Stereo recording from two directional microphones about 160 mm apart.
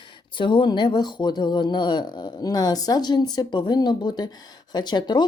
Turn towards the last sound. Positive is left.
turn(degrees=25)  # may be behind; listen again after turning